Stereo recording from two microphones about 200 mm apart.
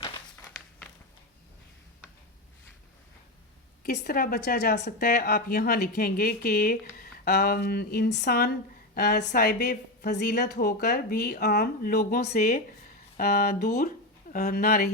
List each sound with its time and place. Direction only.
3.8 s speech: 50° left (ahead or behind)